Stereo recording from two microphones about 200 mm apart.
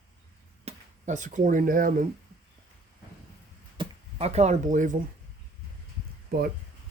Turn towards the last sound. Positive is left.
turn(degrees=-50)  # may be behind; listen again after turning